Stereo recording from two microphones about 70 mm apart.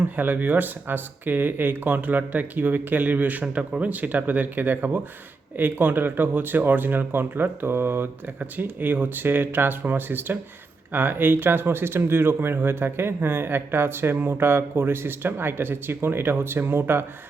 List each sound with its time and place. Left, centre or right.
0.2 s speech: right